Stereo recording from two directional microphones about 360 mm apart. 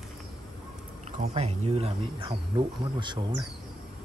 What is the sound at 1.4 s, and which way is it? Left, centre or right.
Speech, centre.